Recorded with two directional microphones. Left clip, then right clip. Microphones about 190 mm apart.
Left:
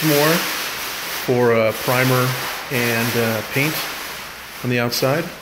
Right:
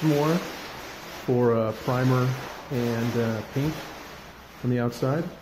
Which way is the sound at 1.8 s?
10° left (ahead or behind).